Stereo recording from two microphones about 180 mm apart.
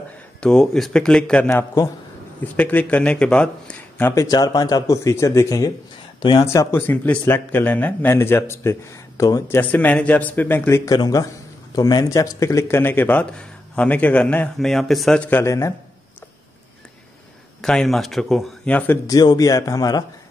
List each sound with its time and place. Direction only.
0.4 s speech: 5° left (ahead or behind)
1.5 s speech: 15° left (ahead or behind)
4.1 s speech: 20° left (ahead or behind)
17.6 s speech: 5° left (ahead or behind)
19.0 s speech: 20° left (ahead or behind)